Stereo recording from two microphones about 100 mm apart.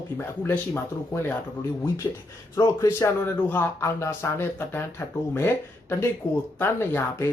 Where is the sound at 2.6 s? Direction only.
30° left (ahead or behind).